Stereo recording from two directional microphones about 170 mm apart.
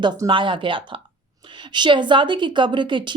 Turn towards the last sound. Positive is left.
turn(degrees=-30)  # may be behind; listen again after turning